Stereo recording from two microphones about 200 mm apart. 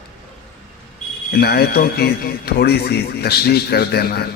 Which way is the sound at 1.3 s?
50° left (ahead or behind).